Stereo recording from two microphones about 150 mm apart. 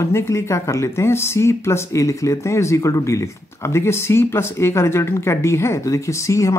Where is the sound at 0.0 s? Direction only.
20° left (ahead or behind).